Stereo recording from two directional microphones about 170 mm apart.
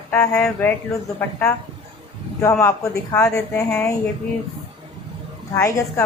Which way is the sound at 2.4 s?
15° left (ahead or behind).